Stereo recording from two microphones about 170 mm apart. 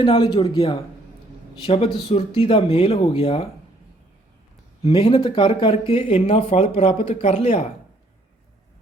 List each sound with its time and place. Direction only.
0.0 s speech: 30° left (ahead or behind)
4.8 s speech: 35° left (ahead or behind)